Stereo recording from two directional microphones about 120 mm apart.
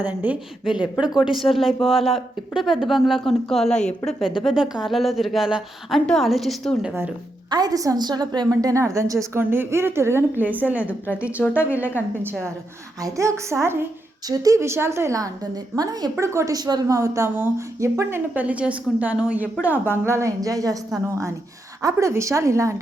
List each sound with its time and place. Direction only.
0.0 s a woman's voice: 15° right (ahead or behind); by 4.1 s 5° left (ahead or behind)
4.4 s a woman's voice: 5° right (ahead or behind)
7.5 s a woman's voice: 30° right (ahead or behind)
18.3 s a woman's voice: 10° right (ahead or behind); by 20.7 s 30° right (ahead or behind)
21.8 s a woman's voice: 25° right (ahead or behind)